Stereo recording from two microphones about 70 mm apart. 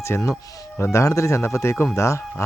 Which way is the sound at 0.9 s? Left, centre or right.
Left.